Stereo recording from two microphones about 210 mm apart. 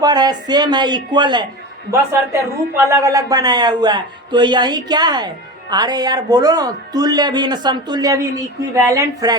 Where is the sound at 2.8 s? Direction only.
15° right (ahead or behind).